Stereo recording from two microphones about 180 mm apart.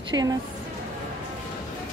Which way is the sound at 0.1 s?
20° right (ahead or behind).